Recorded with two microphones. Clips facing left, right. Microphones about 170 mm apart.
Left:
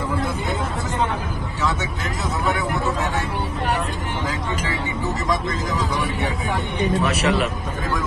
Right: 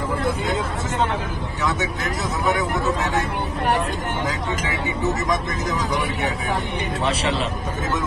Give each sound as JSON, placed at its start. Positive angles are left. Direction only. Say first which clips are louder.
{"t": 2.4, "sound": "speech", "louder": "right 2 dB", "side_deg": -20}
{"t": 4.6, "sound": "speech", "louder": "right 2 dB", "side_deg": -20}
{"t": 7.0, "sound": "speech", "louder": "even", "side_deg": -30}